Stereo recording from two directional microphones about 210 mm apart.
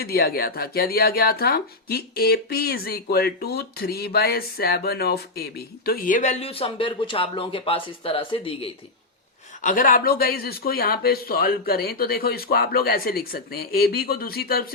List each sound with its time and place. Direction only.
0.0 s speech: 45° left (ahead or behind); by 8.7 s 25° left (ahead or behind)
9.6 s speech: 40° left (ahead or behind)